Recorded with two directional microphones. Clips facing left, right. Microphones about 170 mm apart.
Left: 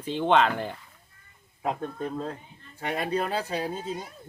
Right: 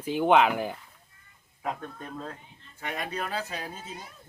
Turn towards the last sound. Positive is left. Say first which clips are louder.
# left 8 dB
turn(degrees=30)  # may be behind; listen again after turning